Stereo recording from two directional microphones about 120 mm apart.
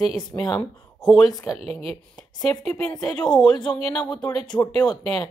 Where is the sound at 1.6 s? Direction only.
60° right (ahead or behind).